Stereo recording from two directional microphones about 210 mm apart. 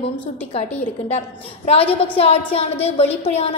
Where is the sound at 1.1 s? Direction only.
30° left (ahead or behind).